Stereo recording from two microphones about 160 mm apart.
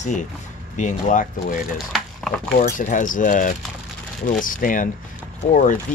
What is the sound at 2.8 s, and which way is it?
Speech, 55° left (ahead or behind).